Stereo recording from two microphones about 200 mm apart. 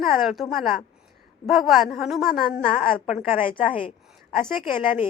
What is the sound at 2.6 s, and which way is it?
Speech, 40° left (ahead or behind).